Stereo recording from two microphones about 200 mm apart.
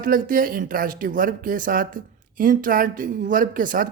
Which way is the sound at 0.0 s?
45° right (ahead or behind).